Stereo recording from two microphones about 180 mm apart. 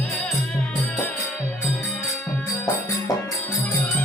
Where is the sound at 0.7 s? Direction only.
Centre (ahead or behind).